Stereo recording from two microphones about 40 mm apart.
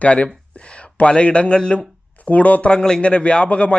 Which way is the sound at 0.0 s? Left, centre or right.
Left.